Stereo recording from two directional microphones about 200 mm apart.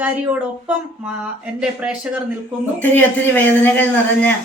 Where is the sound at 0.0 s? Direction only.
5° right (ahead or behind).